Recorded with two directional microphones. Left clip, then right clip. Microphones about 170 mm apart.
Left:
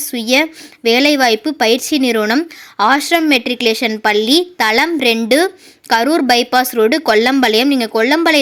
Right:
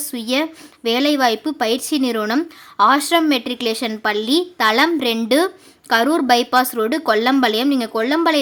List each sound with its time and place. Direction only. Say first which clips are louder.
0.0 s speech: left 7 dB; 15° left (ahead or behind)